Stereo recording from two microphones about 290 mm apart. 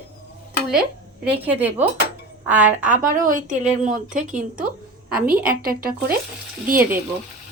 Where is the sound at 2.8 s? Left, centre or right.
Right.